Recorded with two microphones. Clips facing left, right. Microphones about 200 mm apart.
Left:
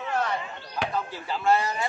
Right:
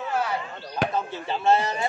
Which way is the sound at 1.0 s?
25° right (ahead or behind).